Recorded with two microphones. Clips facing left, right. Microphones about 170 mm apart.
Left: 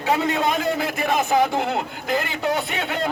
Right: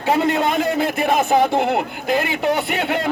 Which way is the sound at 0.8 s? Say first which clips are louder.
Right 4 dB; 55° right (ahead or behind).